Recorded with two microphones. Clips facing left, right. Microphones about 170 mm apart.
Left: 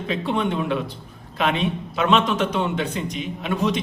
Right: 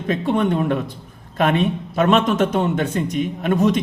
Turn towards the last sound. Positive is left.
turn(degrees=-50)  # may be behind; listen again after turning